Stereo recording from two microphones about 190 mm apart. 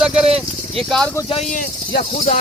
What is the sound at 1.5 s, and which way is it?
Speech, 45° left (ahead or behind).